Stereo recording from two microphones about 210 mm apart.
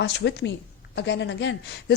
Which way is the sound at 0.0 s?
55° left (ahead or behind).